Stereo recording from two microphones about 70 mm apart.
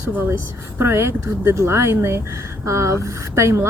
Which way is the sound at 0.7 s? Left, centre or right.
Right.